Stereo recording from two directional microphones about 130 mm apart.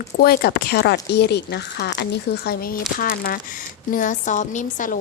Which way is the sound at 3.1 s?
90° left.